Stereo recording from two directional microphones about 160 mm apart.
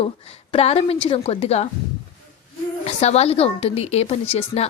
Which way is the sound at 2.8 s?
45° left (ahead or behind).